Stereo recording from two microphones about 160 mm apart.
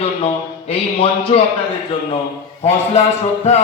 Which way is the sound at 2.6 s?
45° left (ahead or behind).